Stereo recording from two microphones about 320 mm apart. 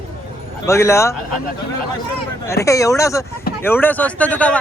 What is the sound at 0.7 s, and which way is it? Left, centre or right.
Speech, centre.